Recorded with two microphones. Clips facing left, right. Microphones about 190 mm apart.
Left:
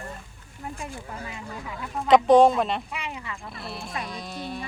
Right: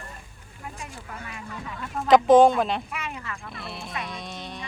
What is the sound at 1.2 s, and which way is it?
Speech, 30° left (ahead or behind).